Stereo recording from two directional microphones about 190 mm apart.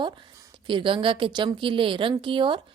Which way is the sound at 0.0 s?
25° right (ahead or behind).